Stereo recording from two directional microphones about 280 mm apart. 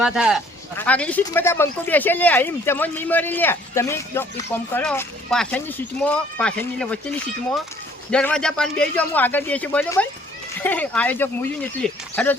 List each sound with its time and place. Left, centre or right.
0.0 s speech: centre
8.1 s speech: centre